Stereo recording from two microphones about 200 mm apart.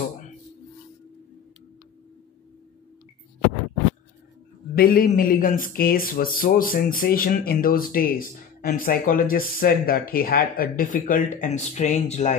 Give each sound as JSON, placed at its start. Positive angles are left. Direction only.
{"t": 4.7, "sound": "a man's voice", "side_deg": 50}